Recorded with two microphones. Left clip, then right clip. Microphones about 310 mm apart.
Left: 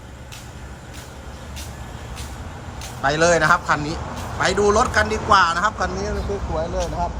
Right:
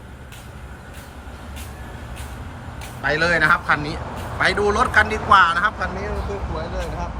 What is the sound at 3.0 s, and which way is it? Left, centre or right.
A man's voice, centre.